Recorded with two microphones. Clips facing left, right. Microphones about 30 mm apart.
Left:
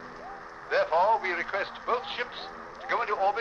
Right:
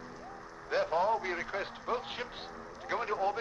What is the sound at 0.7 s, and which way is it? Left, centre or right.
A man's voice, left.